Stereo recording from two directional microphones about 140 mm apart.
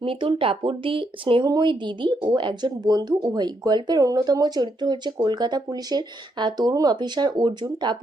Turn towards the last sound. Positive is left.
turn(degrees=-30)  # may be behind; listen again after turning